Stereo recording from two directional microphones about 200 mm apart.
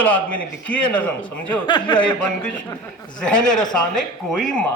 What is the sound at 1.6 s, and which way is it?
Speech, 20° left (ahead or behind).